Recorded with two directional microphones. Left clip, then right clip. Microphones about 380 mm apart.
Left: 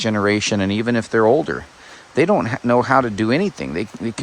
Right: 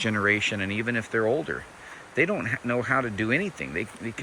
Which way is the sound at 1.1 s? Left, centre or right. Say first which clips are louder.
Left 11 dB; left.